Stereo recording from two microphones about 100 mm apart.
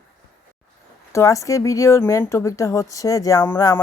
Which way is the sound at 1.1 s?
30° left (ahead or behind).